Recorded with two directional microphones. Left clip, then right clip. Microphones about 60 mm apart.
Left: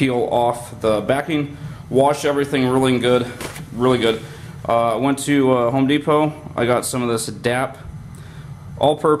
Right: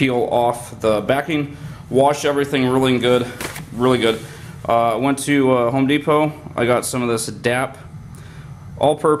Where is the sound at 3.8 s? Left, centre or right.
Right.